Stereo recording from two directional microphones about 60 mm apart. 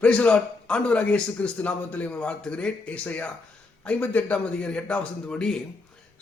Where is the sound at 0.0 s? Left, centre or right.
Centre.